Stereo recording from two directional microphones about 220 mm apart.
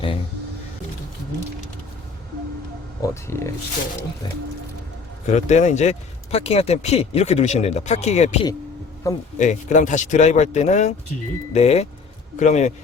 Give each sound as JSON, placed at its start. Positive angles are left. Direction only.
{"t": 3.0, "sound": "speech", "side_deg": 10}
{"t": 5.2, "sound": "speech", "side_deg": 30}
{"t": 9.0, "sound": "speech", "side_deg": 15}
{"t": 9.4, "sound": "speech", "side_deg": 35}